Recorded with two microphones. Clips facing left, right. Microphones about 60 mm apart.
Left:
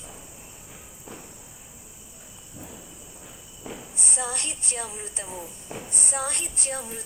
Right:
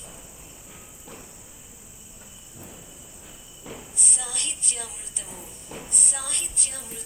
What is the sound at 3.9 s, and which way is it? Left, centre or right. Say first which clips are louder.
A woman's voice: left 6 dB; left.